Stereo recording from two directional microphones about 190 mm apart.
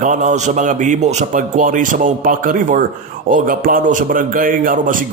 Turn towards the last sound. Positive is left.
turn(degrees=-45)  # may be behind; listen again after turning